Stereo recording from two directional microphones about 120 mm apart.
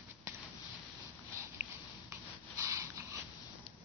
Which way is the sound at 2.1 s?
25° right (ahead or behind).